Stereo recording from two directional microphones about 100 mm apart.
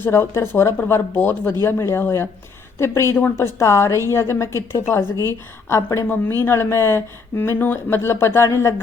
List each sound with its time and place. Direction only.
0.0 s speech: 25° left (ahead or behind)